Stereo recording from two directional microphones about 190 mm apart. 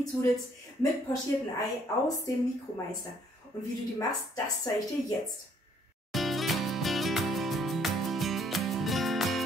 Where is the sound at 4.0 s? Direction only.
20° left (ahead or behind).